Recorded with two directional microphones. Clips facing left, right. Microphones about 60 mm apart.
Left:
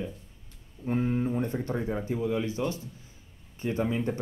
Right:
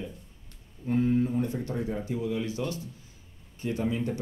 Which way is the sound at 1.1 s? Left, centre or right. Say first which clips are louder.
Right 2 dB; left.